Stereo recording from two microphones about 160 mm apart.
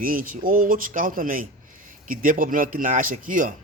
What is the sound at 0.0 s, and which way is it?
Speech, 60° right (ahead or behind).